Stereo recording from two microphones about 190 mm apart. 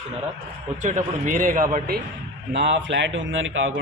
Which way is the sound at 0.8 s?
40° right (ahead or behind).